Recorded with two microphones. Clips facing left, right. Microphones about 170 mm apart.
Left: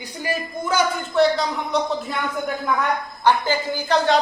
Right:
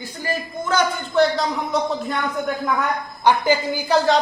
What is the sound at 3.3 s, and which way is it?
Speech, 15° right (ahead or behind).